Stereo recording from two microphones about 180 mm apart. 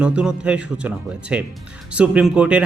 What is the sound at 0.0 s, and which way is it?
A man's voice, 5° right (ahead or behind).